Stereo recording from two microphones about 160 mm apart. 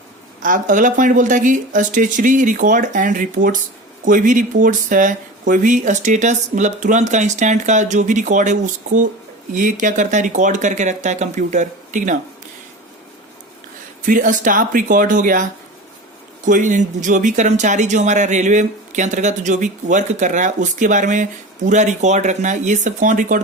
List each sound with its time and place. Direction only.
0.4 s speech: 55° right (ahead or behind)
14.0 s speech: 55° right (ahead or behind)
16.5 s speech: 50° right (ahead or behind)